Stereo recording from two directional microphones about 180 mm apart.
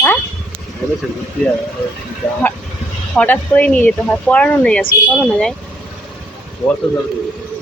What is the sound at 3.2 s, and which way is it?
Speech, 10° left (ahead or behind).